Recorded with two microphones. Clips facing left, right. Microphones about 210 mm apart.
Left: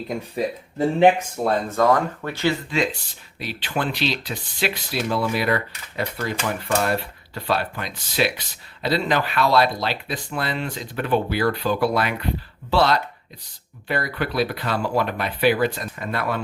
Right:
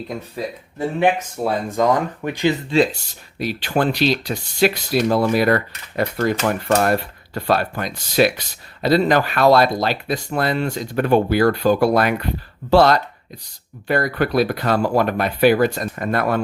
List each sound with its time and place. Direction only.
1.5 s speech: 10° right (ahead or behind)
2.6 s speech: 35° right (ahead or behind)